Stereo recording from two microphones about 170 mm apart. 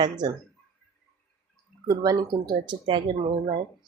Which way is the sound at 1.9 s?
25° right (ahead or behind).